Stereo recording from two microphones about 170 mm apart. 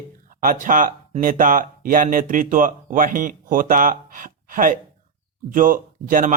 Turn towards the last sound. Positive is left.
turn(degrees=-55)  # may be behind; listen again after turning